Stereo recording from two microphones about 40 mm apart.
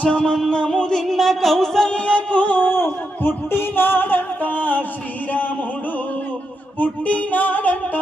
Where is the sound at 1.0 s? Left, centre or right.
Centre.